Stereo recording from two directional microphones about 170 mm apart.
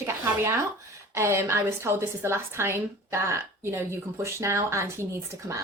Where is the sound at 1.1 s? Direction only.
15° right (ahead or behind).